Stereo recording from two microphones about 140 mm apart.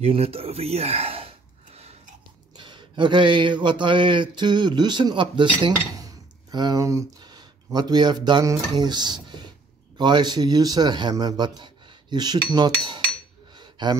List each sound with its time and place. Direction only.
0.0 s speech: 45° right (ahead or behind)
2.5 s a man's voice: 35° right (ahead or behind)
13.6 s a sound: 30° right (ahead or behind)